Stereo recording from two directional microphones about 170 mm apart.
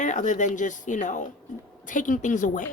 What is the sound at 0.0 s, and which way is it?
Speech, 45° left (ahead or behind).